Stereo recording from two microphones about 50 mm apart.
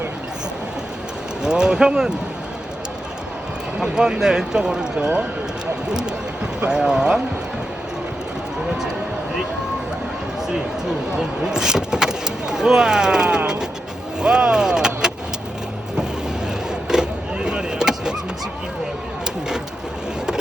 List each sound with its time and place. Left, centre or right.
1.4 s speech: centre
3.8 s speech: centre
5.9 s speech: centre
11.4 s speech: centre
16.9 s vehicle: centre